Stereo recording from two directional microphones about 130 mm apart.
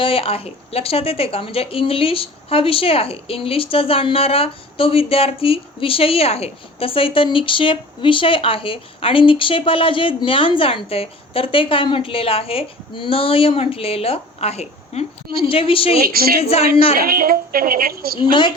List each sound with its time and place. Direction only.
0.0 s a woman's voice: 45° left (ahead or behind)
15.4 s a woman's voice: 45° left (ahead or behind)
17.1 s a woman's voice: 90° right